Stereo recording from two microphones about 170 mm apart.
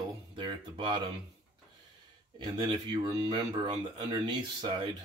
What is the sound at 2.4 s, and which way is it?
Speech, 25° right (ahead or behind).